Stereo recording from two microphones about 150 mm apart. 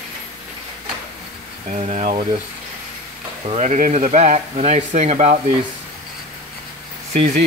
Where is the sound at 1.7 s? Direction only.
45° right (ahead or behind).